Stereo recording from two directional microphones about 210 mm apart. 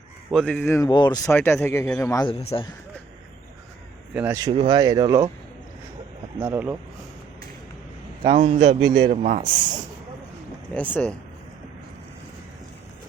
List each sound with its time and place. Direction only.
0.3 s speech: 5° left (ahead or behind)
2.4 s speech: 30° left (ahead or behind)
4.1 s speech: 10° right (ahead or behind)
6.4 s speech: 10° right (ahead or behind)
8.2 s a man's voice: 25° right (ahead or behind)
10.8 s speech: 5° left (ahead or behind)